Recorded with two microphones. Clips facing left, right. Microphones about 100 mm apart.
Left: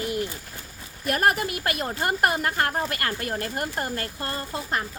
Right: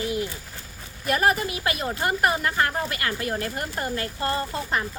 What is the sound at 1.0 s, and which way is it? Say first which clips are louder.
A woman's voice: right 1 dB; 50° left (ahead or behind).